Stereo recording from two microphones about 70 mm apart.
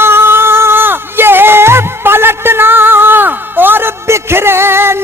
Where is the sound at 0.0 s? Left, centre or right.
Right.